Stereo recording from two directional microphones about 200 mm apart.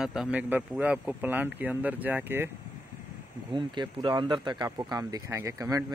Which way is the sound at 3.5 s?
25° right (ahead or behind).